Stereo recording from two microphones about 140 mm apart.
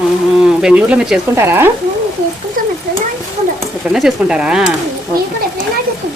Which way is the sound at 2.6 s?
85° right.